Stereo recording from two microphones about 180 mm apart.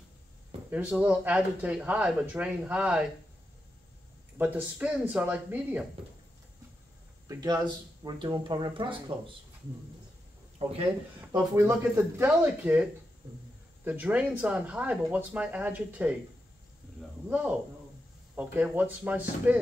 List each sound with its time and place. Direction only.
0.7 s speech: 10° right (ahead or behind)
4.4 s speech: 10° right (ahead or behind)
7.2 s speech: 20° right (ahead or behind)
10.6 s speech: 30° right (ahead or behind)
11.1 s speech: 10° right (ahead or behind)
13.8 s speech: 10° right (ahead or behind)
17.3 s speech: 10° right (ahead or behind)